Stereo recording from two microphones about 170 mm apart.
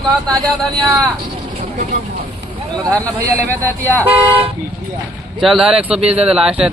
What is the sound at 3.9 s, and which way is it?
Speech, 15° right (ahead or behind).